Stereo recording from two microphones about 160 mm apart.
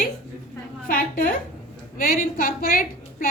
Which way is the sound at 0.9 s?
60° left (ahead or behind).